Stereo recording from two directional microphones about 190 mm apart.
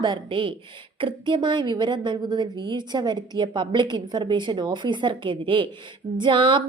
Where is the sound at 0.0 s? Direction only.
25° right (ahead or behind).